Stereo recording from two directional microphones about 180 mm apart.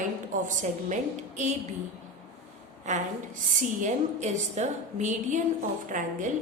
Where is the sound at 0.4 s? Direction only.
45° right (ahead or behind).